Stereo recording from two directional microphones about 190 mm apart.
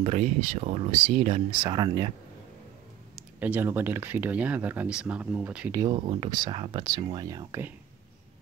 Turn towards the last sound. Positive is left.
turn(degrees=-15)  # may be behind; listen again after turning